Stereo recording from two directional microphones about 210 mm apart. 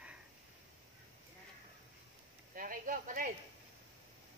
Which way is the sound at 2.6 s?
40° right (ahead or behind).